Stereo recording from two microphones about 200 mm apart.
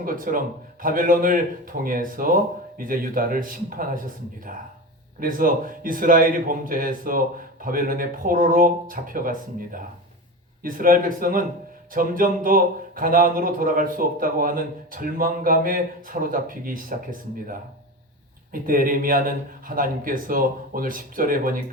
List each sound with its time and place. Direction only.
0.0 s speech: 45° right (ahead or behind)